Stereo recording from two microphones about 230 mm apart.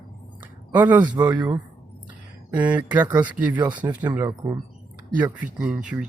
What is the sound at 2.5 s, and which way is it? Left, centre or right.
Speech, centre.